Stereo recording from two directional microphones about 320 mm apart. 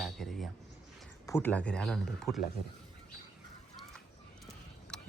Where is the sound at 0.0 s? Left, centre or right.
Centre.